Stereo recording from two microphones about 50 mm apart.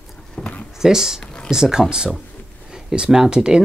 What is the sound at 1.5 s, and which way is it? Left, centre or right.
Speech, centre.